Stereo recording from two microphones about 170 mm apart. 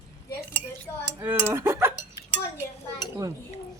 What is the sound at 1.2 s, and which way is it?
Speech, 15° right (ahead or behind).